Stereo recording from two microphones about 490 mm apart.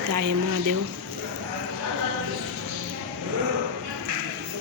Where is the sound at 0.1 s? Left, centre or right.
Right.